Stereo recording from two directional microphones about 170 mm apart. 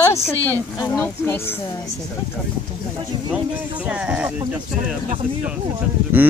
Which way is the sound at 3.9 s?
5° right (ahead or behind).